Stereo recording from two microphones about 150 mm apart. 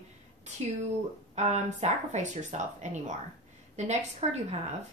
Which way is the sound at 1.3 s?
50° right (ahead or behind).